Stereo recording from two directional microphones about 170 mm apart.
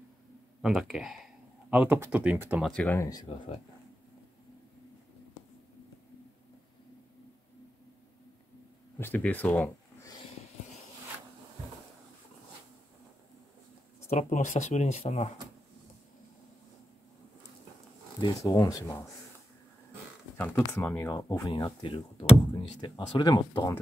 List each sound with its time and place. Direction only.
0.6 s speech: centre (ahead or behind)
2.6 s speech: centre (ahead or behind)
2.9 s speech: 20° left (ahead or behind)
9.0 s speech: 10° left (ahead or behind)
14.1 s speech: 45° left (ahead or behind)
18.2 s speech: 20° left (ahead or behind)
20.3 s speech: 10° left (ahead or behind)
21.8 s speech: 35° left (ahead or behind)